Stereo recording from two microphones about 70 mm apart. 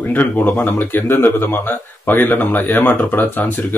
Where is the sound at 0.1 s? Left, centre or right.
Left.